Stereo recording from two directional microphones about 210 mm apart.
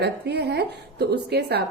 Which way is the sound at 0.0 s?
55° right (ahead or behind).